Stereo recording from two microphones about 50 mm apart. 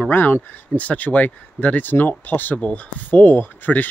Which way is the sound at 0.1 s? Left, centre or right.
Left.